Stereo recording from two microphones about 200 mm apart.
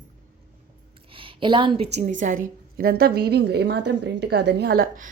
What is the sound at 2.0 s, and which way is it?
A woman's voice, 40° right (ahead or behind).